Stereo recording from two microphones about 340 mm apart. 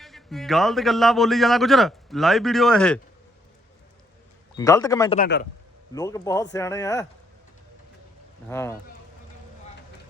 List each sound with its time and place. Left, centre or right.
0.0 s a man's voice: centre
4.5 s a man's voice: centre
5.2 s a man's voice: left
5.9 s a man's voice: centre
8.4 s a man's voice: centre